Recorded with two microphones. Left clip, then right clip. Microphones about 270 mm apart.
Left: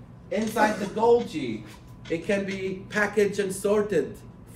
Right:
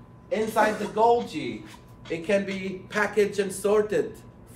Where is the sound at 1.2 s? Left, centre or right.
Centre.